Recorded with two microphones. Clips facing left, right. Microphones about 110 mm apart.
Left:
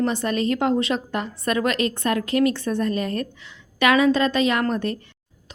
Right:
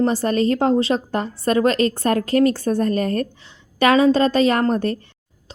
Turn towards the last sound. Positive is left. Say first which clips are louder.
# right 3 dB
turn(degrees=-35)  # may be behind; listen again after turning